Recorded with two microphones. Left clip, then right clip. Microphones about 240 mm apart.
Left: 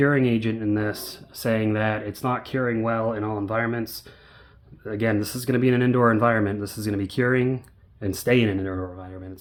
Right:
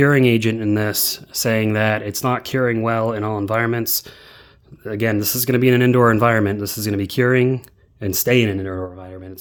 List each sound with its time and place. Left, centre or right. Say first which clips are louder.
0.0 s speech: right 6 dB; right